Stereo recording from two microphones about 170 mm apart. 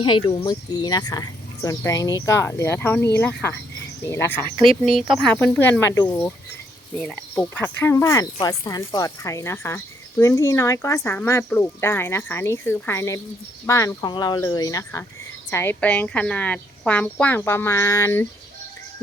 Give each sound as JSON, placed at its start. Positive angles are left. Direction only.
{"t": 0.0, "sound": "speech", "side_deg": 30}
{"t": 4.5, "sound": "speech", "side_deg": -35}
{"t": 5.1, "sound": "speech", "side_deg": 5}